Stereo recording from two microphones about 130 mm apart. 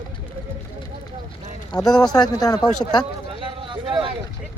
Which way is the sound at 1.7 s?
30° left (ahead or behind).